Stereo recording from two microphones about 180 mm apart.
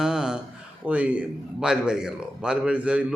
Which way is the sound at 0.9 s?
5° right (ahead or behind).